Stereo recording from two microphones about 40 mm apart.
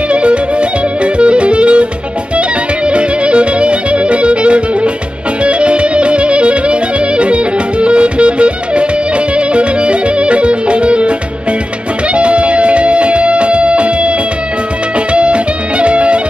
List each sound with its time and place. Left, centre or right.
0.1 s music: right
15.1 s music: right